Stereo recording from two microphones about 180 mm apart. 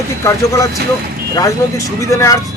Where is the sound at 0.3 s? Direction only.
15° left (ahead or behind).